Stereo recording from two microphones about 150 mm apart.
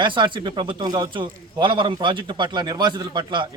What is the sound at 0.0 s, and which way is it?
A man's voice, 30° right (ahead or behind).